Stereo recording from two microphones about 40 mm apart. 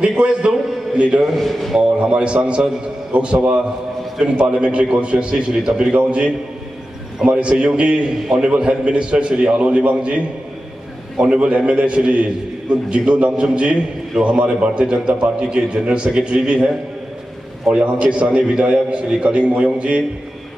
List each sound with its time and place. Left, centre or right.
0.2 s a man's voice: right
1.2 s speech: centre
2.0 s a man's voice: right
5.9 s a man's voice: right
17.7 s a man's voice: right